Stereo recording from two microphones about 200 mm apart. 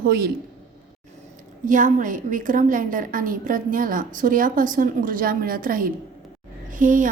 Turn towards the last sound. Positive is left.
turn(degrees=-40)  # may be behind; listen again after turning